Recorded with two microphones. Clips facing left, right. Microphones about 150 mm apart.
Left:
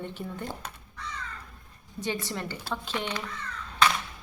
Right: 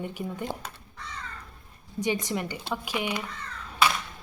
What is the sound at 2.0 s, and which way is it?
Speech, 15° right (ahead or behind).